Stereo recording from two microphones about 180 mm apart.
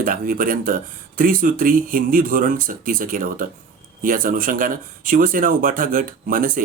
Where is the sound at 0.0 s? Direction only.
50° right (ahead or behind).